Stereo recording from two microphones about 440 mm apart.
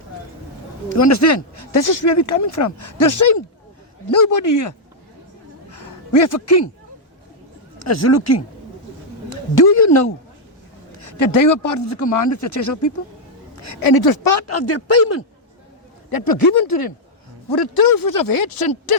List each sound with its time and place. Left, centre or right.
0.9 s speech: left
6.2 s speech: left
7.9 s speech: left
9.6 s speech: left
11.0 s speech: left
13.8 s speech: left
14.3 s speech: left
16.0 s speech: left